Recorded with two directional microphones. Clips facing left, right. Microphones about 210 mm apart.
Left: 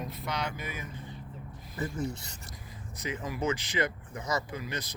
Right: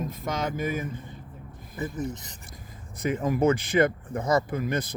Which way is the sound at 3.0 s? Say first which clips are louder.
Right 10 dB; 50° right (ahead or behind).